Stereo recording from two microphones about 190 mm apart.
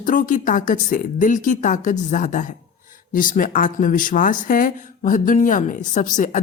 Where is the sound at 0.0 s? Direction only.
45° left (ahead or behind).